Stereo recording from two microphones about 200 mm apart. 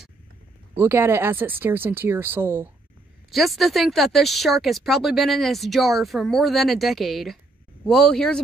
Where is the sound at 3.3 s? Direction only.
Centre (ahead or behind).